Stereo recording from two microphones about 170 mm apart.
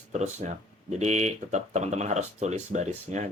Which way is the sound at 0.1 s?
45° right (ahead or behind).